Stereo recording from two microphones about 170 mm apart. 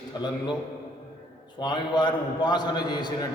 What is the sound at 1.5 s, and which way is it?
A man's voice, 25° left (ahead or behind).